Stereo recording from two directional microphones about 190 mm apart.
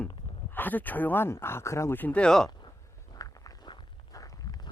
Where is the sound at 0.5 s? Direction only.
10° left (ahead or behind).